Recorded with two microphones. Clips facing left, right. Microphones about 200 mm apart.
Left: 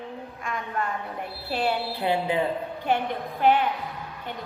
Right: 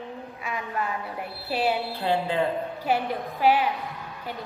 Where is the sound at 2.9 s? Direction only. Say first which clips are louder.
Even; 5° right (ahead or behind).